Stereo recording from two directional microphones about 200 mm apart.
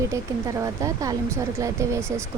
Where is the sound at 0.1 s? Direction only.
15° right (ahead or behind).